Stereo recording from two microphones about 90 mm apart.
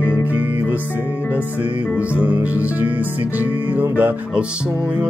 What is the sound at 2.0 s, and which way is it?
Music, 15° right (ahead or behind).